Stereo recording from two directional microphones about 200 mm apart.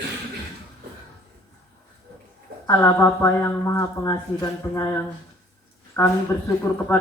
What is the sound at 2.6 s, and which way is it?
Speech, 15° left (ahead or behind).